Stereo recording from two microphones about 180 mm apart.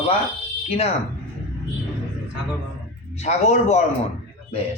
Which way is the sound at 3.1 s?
35° left (ahead or behind).